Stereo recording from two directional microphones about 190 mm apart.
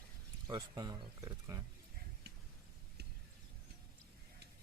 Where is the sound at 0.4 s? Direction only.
20° right (ahead or behind).